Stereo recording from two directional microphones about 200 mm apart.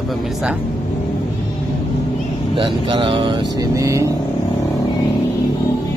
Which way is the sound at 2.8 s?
25° right (ahead or behind).